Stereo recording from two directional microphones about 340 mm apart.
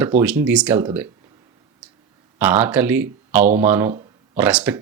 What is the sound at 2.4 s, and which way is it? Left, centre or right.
Speech, centre.